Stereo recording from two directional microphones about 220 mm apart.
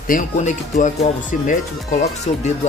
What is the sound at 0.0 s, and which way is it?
Speech, 35° left (ahead or behind).